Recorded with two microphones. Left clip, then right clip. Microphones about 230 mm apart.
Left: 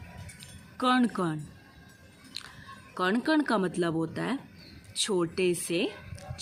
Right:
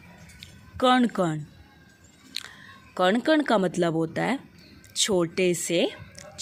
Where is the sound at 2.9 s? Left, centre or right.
Right.